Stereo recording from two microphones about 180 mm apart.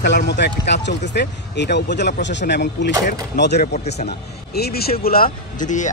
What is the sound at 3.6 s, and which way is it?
Speech, 40° left (ahead or behind).